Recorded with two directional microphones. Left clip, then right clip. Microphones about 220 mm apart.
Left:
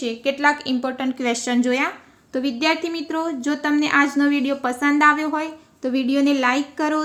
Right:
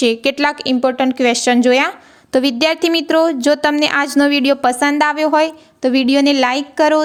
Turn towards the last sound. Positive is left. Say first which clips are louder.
# right 9 dB
turn(degrees=-45)  # may be behind; listen again after turning